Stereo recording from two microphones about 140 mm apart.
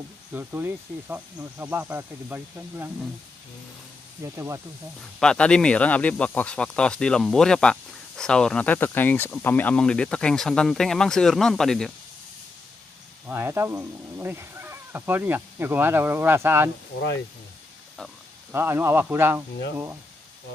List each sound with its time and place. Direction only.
0.3 s speech: 15° right (ahead or behind)
4.2 s speech: 20° right (ahead or behind)
5.2 s speech: 5° left (ahead or behind)
13.3 s speech: 20° right (ahead or behind)
18.5 s speech: 15° right (ahead or behind)